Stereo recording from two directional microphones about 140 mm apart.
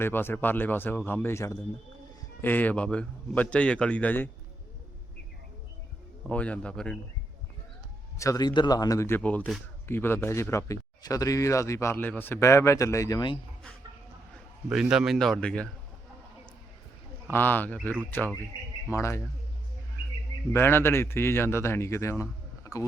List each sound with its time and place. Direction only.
0.0 s a man's voice: 15° left (ahead or behind)
6.2 s a man's voice: 10° left (ahead or behind)
8.2 s speech: 25° left (ahead or behind)
14.7 s a man's voice: 5° right (ahead or behind)
17.3 s a man's voice: 15° left (ahead or behind)
20.5 s a man's voice: 15° left (ahead or behind)
22.2 s a sound: 20° left (ahead or behind)